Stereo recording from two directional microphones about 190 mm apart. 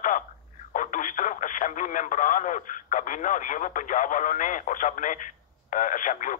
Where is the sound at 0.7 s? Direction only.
45° left (ahead or behind).